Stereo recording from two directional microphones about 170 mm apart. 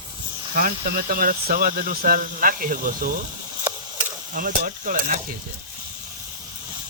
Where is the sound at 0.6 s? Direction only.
60° right (ahead or behind).